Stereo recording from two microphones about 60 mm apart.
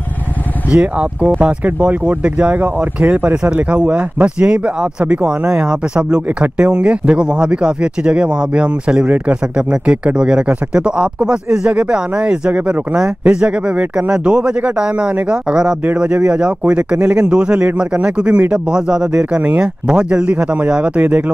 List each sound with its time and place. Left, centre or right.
0.7 s speech: right
6.2 s speech: right